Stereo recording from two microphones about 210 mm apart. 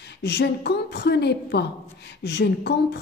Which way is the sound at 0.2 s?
50° left (ahead or behind).